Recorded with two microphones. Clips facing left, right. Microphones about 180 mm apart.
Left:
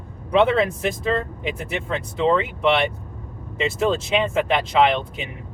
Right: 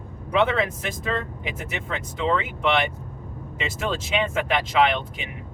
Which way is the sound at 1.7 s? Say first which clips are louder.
Left 5 dB; 35° left (ahead or behind).